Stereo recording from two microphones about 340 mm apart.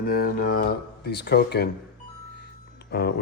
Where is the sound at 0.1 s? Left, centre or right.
Left.